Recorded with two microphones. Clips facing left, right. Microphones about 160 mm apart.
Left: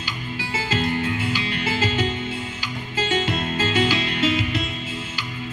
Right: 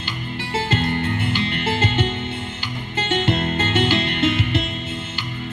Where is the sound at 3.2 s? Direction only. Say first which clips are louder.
Right 3 dB; 60° right (ahead or behind).